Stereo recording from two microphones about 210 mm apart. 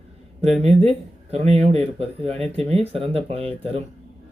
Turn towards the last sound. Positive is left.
turn(degrees=-30)  # may be behind; listen again after turning